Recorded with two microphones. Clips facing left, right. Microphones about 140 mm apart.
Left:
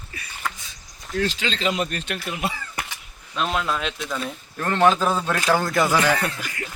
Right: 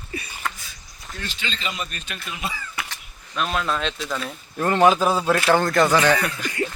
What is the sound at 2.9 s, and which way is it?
Camera, 20° left (ahead or behind).